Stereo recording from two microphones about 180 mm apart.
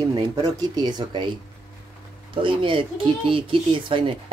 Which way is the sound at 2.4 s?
30° right (ahead or behind).